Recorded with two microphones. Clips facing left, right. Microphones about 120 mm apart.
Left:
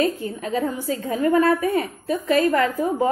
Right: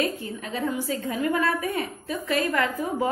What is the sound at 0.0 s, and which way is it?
A woman's voice, 35° left (ahead or behind).